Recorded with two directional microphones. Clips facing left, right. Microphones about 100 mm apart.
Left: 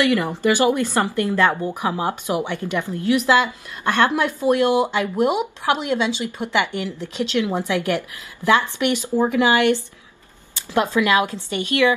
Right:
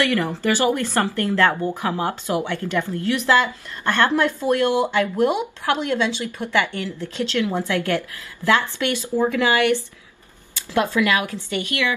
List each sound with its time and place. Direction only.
0.0 s speech: 15° left (ahead or behind)